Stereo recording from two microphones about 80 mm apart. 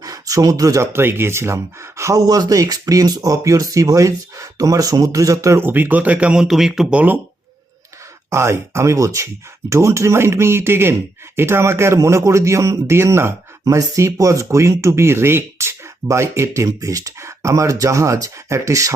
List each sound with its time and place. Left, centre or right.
0.0 s a sound: right
0.9 s speech: right
2.2 s speech: right
5.5 s speech: right; by 6.8 s centre
6.9 s speech: right
8.3 s speech: right